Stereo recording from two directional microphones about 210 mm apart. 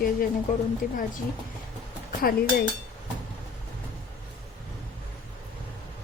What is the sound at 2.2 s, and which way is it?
Speech, 45° left (ahead or behind).